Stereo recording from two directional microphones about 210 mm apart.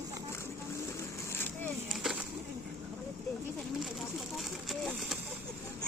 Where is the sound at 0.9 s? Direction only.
10° left (ahead or behind).